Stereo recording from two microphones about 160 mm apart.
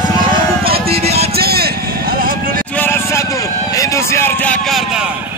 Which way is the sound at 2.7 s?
15° left (ahead or behind).